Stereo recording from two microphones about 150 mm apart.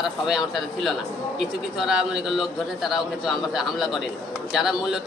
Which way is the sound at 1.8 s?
5° right (ahead or behind).